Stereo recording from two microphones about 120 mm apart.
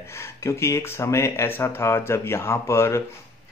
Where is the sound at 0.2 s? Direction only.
25° left (ahead or behind).